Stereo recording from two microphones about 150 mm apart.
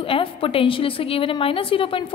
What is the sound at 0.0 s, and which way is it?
A woman's voice, 35° left (ahead or behind).